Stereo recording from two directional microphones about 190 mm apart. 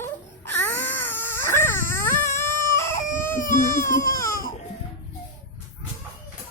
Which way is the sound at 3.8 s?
45° left (ahead or behind).